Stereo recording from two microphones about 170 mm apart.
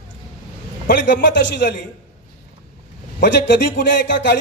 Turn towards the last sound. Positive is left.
turn(degrees=90)